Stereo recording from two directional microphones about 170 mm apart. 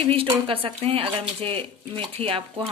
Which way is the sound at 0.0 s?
30° right (ahead or behind).